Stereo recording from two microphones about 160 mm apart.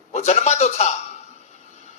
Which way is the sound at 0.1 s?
45° left (ahead or behind).